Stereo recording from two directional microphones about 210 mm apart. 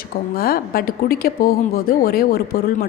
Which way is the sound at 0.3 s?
45° left (ahead or behind).